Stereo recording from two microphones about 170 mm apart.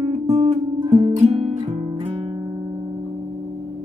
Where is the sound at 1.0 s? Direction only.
40° right (ahead or behind).